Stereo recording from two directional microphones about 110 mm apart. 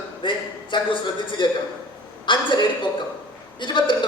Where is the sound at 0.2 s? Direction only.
50° left (ahead or behind).